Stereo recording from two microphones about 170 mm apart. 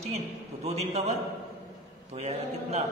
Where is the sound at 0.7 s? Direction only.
40° right (ahead or behind).